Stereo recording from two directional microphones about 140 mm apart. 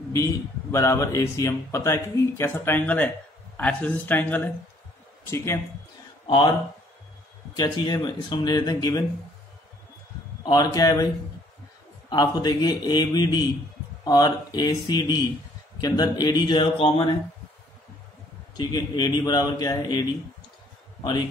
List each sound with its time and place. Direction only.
0.1 s speech: 20° left (ahead or behind)
6.2 s speech: 35° left (ahead or behind)
7.5 s speech: 30° left (ahead or behind)
10.4 s speech: 25° left (ahead or behind)
12.1 s speech: 30° left (ahead or behind)
18.6 s speech: 30° left (ahead or behind)